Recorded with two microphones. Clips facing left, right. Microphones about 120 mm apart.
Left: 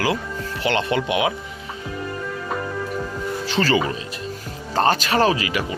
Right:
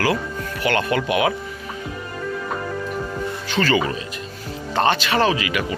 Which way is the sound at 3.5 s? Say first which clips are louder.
Even; 30° left (ahead or behind).